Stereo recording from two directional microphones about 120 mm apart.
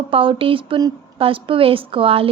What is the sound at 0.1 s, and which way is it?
A woman's voice, 50° right (ahead or behind).